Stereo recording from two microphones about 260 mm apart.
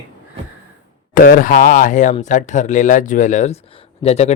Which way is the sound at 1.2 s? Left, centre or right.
Left.